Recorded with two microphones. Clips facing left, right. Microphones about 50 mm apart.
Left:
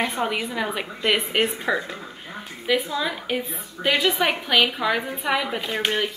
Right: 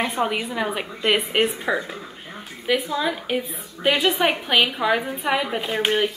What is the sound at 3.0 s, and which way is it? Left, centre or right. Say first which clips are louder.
A woman's voice: right 2 dB; centre.